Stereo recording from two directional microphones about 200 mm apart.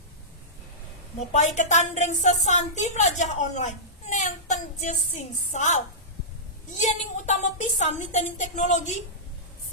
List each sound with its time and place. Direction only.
1.3 s a woman's voice: 35° left (ahead or behind)